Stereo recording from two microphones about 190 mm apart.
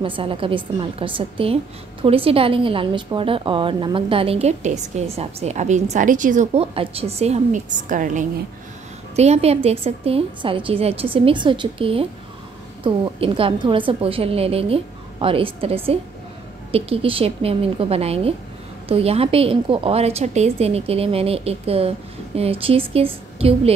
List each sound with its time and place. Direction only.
0.0 s a woman's voice: 25° right (ahead or behind)